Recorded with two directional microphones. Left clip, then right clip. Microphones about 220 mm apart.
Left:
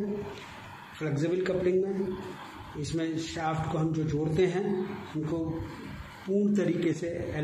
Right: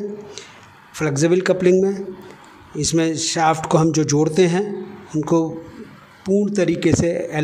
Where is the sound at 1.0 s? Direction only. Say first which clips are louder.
Right 12 dB; 55° right (ahead or behind).